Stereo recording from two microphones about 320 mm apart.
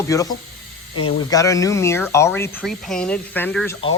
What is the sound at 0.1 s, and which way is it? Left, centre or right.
Speech, centre.